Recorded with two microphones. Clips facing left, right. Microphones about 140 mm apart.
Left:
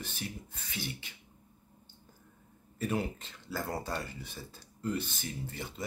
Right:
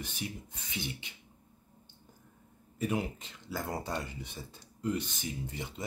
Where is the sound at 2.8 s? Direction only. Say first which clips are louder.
Even; 15° right (ahead or behind).